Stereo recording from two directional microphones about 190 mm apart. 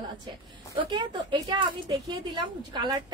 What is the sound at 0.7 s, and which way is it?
A woman's voice, 25° right (ahead or behind).